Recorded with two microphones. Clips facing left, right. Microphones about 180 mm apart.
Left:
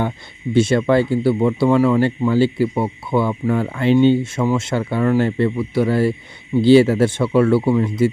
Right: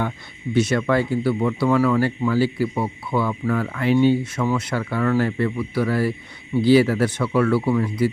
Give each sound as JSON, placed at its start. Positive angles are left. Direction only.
{"t": 0.5, "sound": "speech", "side_deg": 25}